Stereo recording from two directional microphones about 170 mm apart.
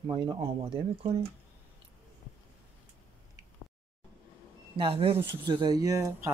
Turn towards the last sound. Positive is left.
turn(degrees=-20)  # may be behind; listen again after turning